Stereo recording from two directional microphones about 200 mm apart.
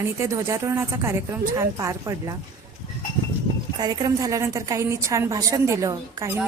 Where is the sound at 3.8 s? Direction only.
20° right (ahead or behind).